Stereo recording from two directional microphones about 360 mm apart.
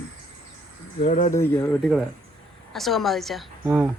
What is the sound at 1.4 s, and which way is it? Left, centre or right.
Speech, centre.